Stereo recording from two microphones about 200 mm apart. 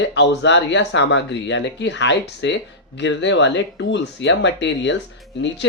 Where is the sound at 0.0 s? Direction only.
60° left (ahead or behind).